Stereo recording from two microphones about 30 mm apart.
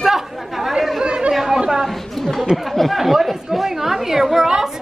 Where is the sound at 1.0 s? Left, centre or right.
Right.